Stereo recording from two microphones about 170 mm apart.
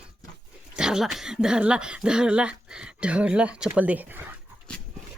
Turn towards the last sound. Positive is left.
turn(degrees=-10)  # may be behind; listen again after turning